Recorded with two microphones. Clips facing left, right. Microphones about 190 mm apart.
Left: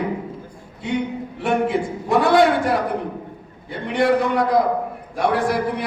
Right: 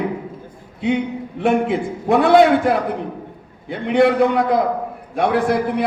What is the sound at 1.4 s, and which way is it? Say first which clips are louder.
A man's voice: right 3 dB; 55° right (ahead or behind).